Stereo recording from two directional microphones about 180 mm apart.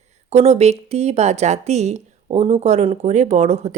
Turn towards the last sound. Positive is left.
turn(degrees=-40)  # may be behind; listen again after turning